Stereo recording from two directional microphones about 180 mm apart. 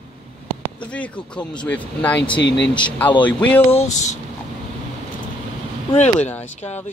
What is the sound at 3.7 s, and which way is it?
Speech, 35° left (ahead or behind).